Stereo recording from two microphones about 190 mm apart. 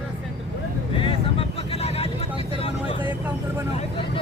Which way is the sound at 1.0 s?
30° left (ahead or behind).